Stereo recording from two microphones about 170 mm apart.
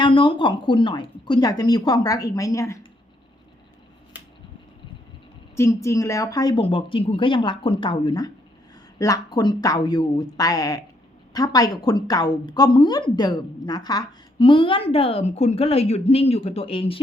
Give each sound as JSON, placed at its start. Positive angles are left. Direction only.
{"t": 0.0, "sound": "a woman's voice", "side_deg": 30}
{"t": 5.5, "sound": "a woman's voice", "side_deg": 15}